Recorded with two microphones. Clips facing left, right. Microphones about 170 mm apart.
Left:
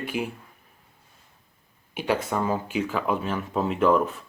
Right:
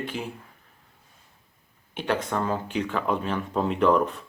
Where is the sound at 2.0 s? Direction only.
10° left (ahead or behind).